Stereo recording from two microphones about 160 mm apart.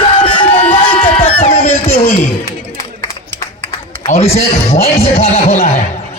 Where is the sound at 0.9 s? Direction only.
35° left (ahead or behind).